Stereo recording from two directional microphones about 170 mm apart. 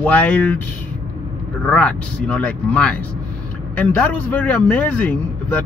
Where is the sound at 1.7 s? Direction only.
5° left (ahead or behind).